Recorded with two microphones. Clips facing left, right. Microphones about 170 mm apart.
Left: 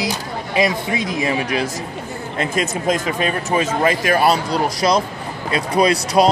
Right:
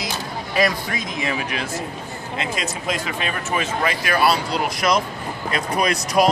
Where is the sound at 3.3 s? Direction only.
35° left (ahead or behind).